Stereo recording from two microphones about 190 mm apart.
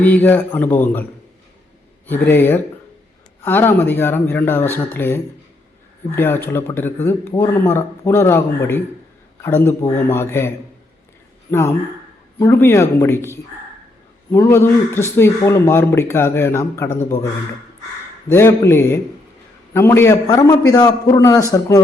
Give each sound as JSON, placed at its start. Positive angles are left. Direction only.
{"t": 0.0, "sound": "a man's voice", "side_deg": 10}
{"t": 2.0, "sound": "a man's voice", "side_deg": 10}
{"t": 12.4, "sound": "a man's voice", "side_deg": 15}
{"t": 18.3, "sound": "a man's voice", "side_deg": 15}